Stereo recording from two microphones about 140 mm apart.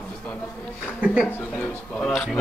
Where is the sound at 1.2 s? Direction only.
15° left (ahead or behind).